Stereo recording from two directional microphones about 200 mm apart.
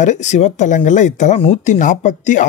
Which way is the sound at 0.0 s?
35° left (ahead or behind).